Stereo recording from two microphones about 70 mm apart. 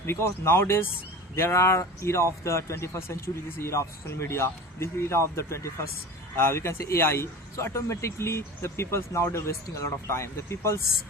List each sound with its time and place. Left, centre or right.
0.0 s a man's voice: left